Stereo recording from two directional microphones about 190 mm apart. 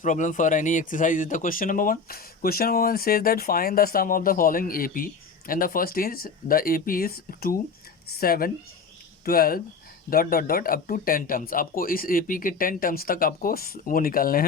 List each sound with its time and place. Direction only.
0.0 s speech: 40° left (ahead or behind)